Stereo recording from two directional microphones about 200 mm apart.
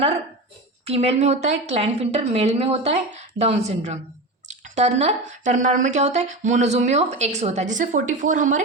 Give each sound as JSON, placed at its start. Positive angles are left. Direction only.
{"t": 0.9, "sound": "speech", "side_deg": -30}